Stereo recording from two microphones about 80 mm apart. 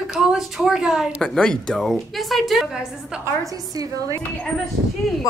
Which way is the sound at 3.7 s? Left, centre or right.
Right.